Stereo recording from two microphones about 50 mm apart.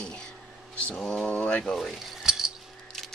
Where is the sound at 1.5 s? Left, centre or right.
Left.